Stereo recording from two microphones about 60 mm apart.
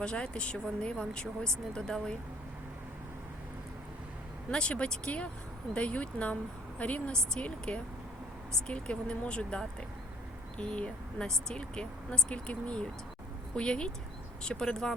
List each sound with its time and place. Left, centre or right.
0.0 s speech: centre
4.5 s speech: centre